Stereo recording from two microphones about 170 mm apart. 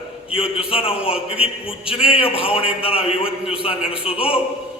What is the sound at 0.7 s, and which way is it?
Speech, 35° left (ahead or behind).